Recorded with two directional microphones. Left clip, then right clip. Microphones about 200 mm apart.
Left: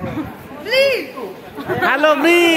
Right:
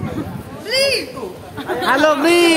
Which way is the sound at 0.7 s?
30° left (ahead or behind).